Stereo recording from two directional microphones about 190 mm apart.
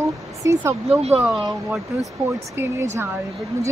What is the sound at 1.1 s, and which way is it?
Speech, 5° right (ahead or behind).